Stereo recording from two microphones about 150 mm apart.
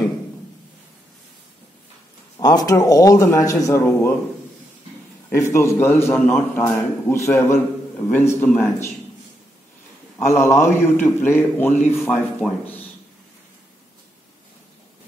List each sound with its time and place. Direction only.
2.3 s a man's voice: 25° left (ahead or behind)
5.3 s a man's voice: 20° left (ahead or behind)
10.1 s a man's voice: 15° left (ahead or behind)
12.4 s speech: centre (ahead or behind)